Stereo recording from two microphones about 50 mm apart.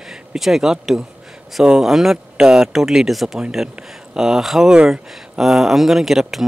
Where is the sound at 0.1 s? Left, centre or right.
Centre.